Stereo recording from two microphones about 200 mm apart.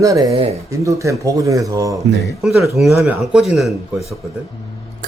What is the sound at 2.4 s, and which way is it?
Speech, centre (ahead or behind).